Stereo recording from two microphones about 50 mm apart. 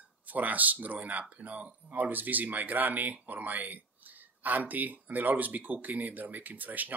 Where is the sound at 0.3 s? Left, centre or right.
Right.